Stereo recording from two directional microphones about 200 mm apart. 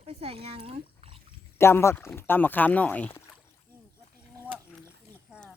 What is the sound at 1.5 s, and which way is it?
Speech, 10° left (ahead or behind).